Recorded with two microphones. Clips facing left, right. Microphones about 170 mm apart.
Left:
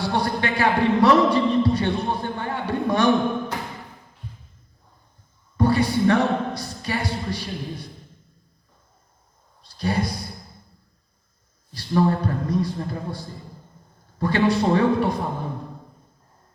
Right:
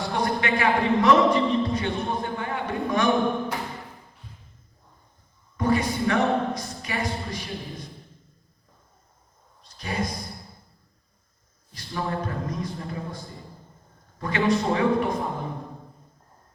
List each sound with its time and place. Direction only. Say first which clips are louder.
0.0 s a man's voice: left 2 dB; 35° left (ahead or behind)
5.5 s speech: left 4 dB; 35° left (ahead or behind)
9.6 s a sound: left 5 dB; 35° left (ahead or behind)
11.7 s a man's voice: left 9 dB; 35° left (ahead or behind)